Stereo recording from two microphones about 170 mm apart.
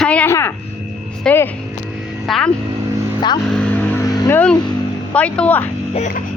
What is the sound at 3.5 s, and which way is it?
Vehicle, 10° left (ahead or behind).